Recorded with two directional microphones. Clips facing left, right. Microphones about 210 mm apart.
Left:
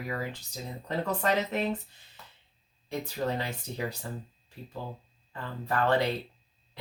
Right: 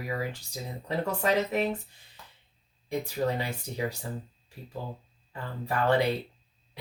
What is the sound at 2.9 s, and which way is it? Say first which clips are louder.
Speech: right 3 dB; 10° right (ahead or behind).